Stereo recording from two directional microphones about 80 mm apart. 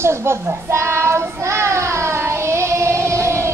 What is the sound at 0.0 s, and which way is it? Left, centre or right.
Child singing, right.